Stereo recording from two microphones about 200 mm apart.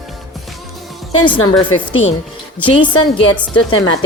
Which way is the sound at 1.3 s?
25° left (ahead or behind).